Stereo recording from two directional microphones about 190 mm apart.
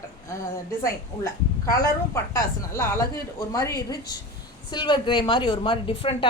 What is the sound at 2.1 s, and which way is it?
A woman's voice, 15° left (ahead or behind).